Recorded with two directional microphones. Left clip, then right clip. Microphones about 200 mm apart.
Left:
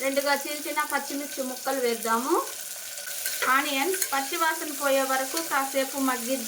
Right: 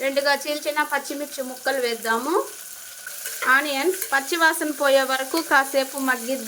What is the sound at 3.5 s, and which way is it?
Frying, 50° right (ahead or behind).